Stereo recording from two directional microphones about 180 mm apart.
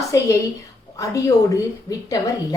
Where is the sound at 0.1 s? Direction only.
20° left (ahead or behind).